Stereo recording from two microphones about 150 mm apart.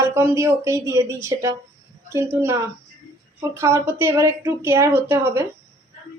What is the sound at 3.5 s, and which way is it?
A woman's voice, 15° right (ahead or behind).